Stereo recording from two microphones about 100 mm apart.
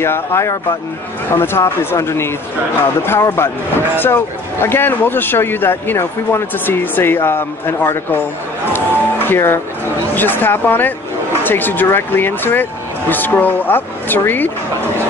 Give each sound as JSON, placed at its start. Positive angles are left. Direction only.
{"t": 0.0, "sound": "a man's voice", "side_deg": 25}